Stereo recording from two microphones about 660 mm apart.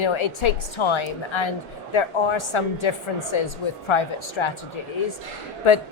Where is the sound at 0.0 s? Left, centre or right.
Left.